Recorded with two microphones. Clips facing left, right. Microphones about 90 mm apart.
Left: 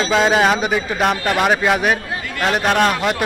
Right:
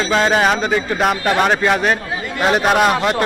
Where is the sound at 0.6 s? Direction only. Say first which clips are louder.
Right 1 dB; 15° left (ahead or behind).